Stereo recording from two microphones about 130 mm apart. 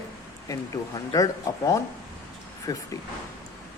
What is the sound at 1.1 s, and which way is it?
Speech, 25° left (ahead or behind).